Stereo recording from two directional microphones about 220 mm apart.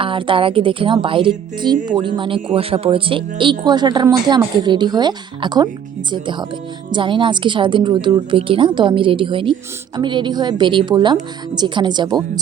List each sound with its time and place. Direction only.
0.0 s a woman's voice: 25° right (ahead or behind)